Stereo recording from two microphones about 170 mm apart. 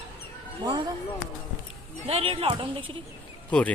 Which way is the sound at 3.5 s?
5° left (ahead or behind).